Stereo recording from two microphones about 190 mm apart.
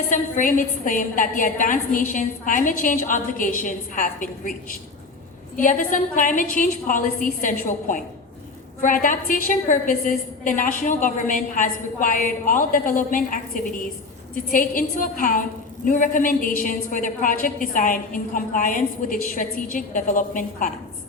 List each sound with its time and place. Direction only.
0.1 s a woman's voice: 45° left (ahead or behind)